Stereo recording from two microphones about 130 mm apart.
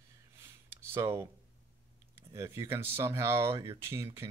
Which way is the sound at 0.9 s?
20° right (ahead or behind).